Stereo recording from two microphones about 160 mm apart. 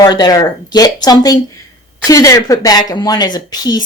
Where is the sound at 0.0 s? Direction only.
25° left (ahead or behind).